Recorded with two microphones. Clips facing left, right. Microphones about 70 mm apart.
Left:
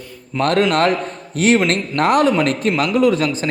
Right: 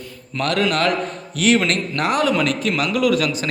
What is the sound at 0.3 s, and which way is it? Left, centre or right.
A man's voice, left.